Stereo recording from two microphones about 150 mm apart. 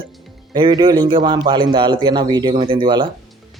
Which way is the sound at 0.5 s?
30° right (ahead or behind).